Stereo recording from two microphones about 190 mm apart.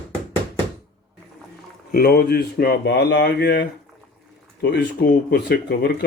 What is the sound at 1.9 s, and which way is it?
Speech, 55° left (ahead or behind).